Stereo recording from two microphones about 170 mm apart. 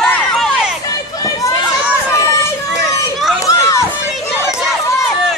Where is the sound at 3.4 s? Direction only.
20° left (ahead or behind).